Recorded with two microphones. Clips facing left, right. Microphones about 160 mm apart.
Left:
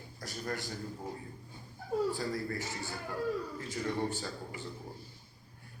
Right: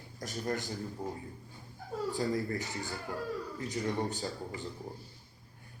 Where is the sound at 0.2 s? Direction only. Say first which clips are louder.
Right 3 dB; 20° right (ahead or behind).